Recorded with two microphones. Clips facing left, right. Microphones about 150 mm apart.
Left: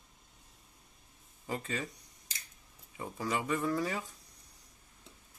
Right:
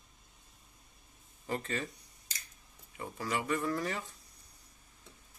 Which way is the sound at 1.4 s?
10° left (ahead or behind).